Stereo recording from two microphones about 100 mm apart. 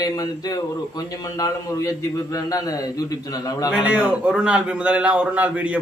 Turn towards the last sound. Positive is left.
turn(degrees=-15)  # may be behind; listen again after turning